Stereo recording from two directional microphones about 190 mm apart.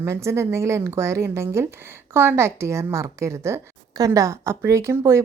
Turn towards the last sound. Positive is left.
turn(degrees=-15)  # may be behind; listen again after turning